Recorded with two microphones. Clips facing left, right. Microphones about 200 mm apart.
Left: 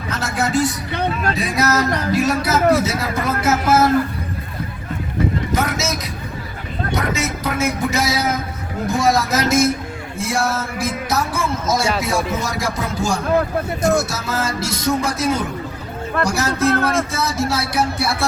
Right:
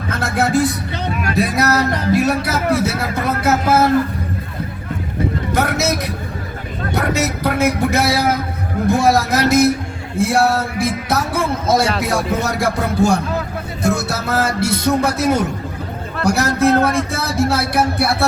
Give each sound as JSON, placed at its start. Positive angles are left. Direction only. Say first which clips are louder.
{"t": 0.1, "sound": "music", "louder": "right 3 dB", "side_deg": -55}
{"t": 1.7, "sound": "speech", "louder": "right 2 dB", "side_deg": -60}
{"t": 5.5, "sound": "vehicle", "louder": "right 4 dB", "side_deg": -60}
{"t": 6.9, "sound": "a sound", "louder": "right 4 dB", "side_deg": -65}
{"t": 8.9, "sound": "speech", "louder": "right 3 dB", "side_deg": -60}